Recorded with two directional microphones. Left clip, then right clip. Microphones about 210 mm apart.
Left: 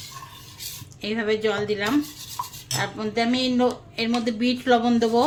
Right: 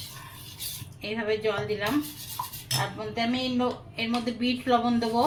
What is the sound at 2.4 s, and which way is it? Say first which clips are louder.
Cutlery: left 3 dB; 5° left (ahead or behind).